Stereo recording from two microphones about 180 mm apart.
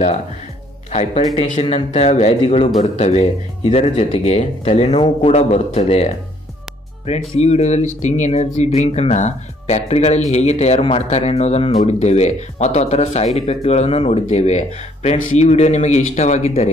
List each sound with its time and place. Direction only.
1.5 s speech: 35° left (ahead or behind)